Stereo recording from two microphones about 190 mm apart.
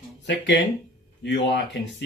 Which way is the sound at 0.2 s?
70° left (ahead or behind).